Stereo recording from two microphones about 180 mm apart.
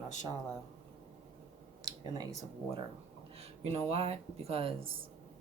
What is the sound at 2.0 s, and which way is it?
Speech, 25° right (ahead or behind).